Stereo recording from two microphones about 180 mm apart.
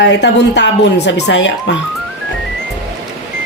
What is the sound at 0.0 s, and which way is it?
Speech, 75° left (ahead or behind).